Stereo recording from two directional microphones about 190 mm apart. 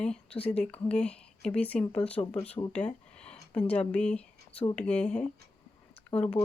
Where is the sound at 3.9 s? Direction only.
5° left (ahead or behind).